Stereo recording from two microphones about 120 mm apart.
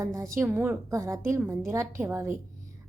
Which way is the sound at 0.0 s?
25° right (ahead or behind).